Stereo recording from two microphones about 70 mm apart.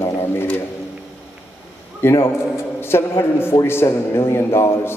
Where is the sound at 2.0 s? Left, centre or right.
Left.